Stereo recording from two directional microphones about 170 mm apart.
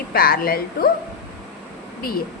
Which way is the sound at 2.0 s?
60° left (ahead or behind).